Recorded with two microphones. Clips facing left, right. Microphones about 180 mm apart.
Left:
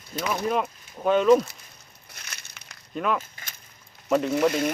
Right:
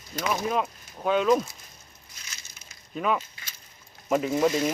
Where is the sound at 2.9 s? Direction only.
Centre (ahead or behind).